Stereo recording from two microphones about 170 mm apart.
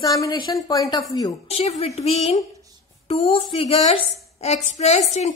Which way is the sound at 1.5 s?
35° left (ahead or behind).